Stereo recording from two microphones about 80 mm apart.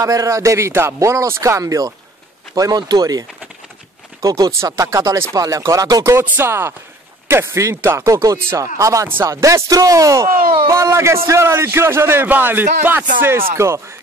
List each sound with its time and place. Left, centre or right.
0.0 s a man's voice: right
6.1 s a man's voice: right